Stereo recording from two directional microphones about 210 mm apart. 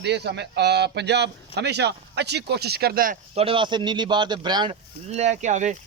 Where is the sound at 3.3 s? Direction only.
25° right (ahead or behind).